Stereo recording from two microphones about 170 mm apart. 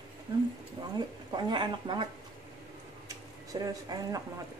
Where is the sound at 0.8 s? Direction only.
25° right (ahead or behind).